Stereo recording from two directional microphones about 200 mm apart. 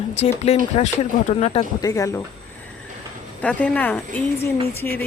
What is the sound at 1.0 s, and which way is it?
Speech, 35° left (ahead or behind).